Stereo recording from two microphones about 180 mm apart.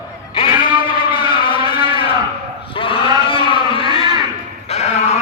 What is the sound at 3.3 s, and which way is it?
Vehicle, 30° left (ahead or behind).